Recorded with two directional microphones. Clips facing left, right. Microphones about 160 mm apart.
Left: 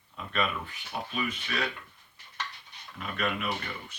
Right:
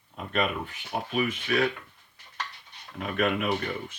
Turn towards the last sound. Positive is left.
turn(degrees=-50)  # may be behind; listen again after turning